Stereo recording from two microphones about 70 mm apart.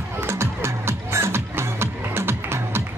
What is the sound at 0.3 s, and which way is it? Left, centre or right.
Music, right.